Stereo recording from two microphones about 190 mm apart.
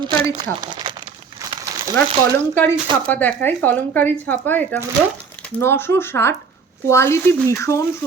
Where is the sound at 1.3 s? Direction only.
20° right (ahead or behind).